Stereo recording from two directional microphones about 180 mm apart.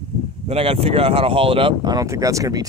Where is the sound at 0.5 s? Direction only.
35° right (ahead or behind).